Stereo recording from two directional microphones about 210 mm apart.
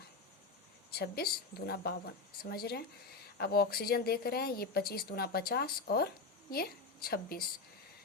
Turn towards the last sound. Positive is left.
turn(degrees=45)  # may be behind; listen again after turning